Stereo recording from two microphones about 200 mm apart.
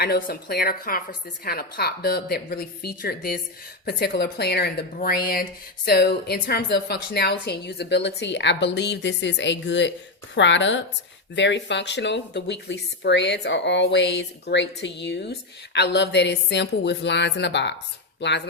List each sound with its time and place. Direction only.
0.0 s speech: 50° left (ahead or behind)